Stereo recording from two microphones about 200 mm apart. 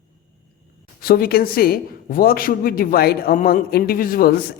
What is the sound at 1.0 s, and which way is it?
A man's voice, 50° left (ahead or behind).